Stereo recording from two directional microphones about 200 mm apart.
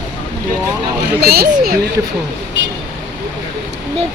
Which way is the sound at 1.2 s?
50° right (ahead or behind).